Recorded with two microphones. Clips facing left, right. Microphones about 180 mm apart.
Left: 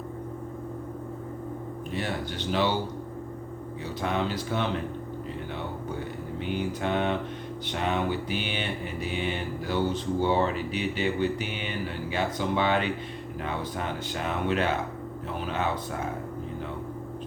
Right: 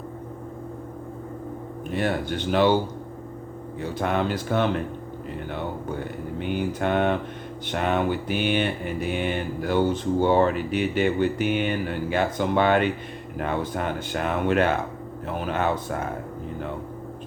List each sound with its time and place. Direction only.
1.9 s mantra: 55° right (ahead or behind)
4.0 s mantra: 55° right (ahead or behind)
6.4 s mantra: 55° right (ahead or behind)